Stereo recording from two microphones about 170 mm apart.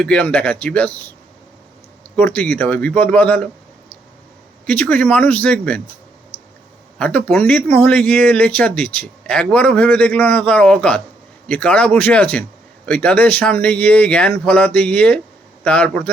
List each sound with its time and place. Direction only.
0.0 s speech: 5° left (ahead or behind)
2.1 s speech: 10° left (ahead or behind)
4.6 s speech: 10° left (ahead or behind)
6.3 s clicking: 35° left (ahead or behind)
7.0 s speech: 5° left (ahead or behind)